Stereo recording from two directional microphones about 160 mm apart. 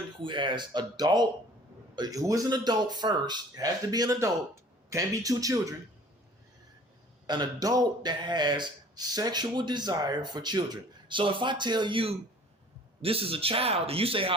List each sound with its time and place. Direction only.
0.2 s speech: 30° right (ahead or behind)
7.3 s a man's voice: 25° right (ahead or behind)